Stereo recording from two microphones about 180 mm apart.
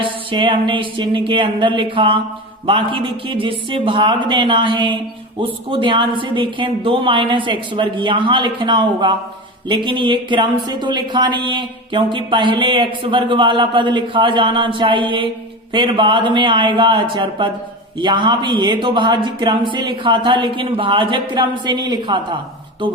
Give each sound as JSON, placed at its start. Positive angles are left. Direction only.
{"t": 0.0, "sound": "speech", "side_deg": -25}